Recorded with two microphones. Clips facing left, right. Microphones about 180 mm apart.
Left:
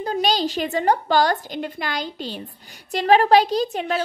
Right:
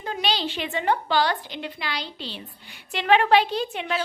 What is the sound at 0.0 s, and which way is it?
A woman's voice, 40° left (ahead or behind).